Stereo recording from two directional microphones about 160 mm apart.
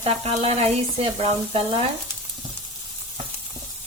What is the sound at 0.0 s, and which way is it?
Speech, 40° right (ahead or behind).